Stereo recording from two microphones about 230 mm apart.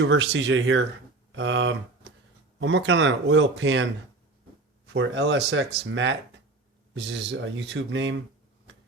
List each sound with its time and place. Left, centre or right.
0.0 s speech: right
4.9 s speech: right